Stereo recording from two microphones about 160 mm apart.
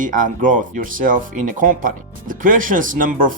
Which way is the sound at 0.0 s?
55° right (ahead or behind).